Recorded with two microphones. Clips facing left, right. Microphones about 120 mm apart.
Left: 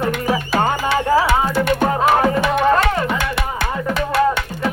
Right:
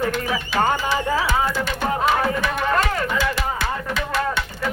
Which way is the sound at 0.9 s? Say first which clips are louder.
Left 6 dB; 65° left (ahead or behind).